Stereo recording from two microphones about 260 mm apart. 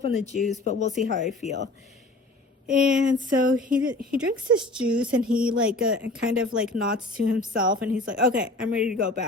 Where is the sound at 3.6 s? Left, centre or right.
Centre.